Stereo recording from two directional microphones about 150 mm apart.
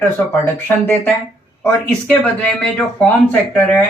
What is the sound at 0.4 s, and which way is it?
Speech, 10° left (ahead or behind).